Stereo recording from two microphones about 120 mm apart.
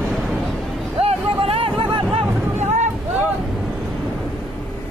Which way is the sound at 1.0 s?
55° right (ahead or behind).